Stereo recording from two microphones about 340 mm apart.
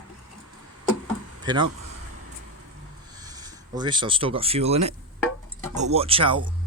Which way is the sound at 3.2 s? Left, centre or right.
Centre.